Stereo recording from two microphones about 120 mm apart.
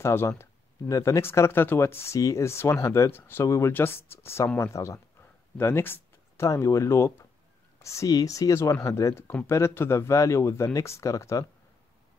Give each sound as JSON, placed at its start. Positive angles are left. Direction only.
{"t": 0.0, "sound": "speech", "side_deg": 20}